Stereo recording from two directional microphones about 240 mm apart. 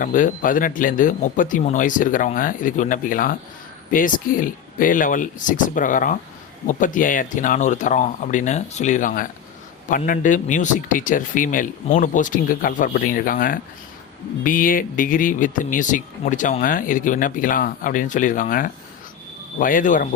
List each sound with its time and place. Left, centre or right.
0.0 s speech: left